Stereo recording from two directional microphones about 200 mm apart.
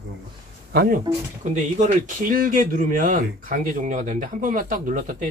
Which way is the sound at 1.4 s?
35° right (ahead or behind).